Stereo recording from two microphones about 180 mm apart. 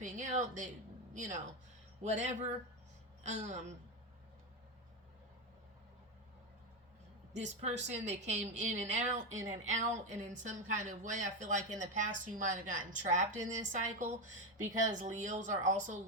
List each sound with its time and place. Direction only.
0.0 s a woman's voice: 40° right (ahead or behind)
7.3 s a woman's voice: 40° right (ahead or behind)